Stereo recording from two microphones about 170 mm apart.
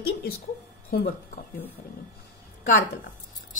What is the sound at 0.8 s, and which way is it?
Speech, 60° left (ahead or behind).